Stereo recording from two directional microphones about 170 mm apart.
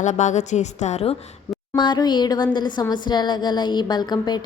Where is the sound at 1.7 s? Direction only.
25° left (ahead or behind).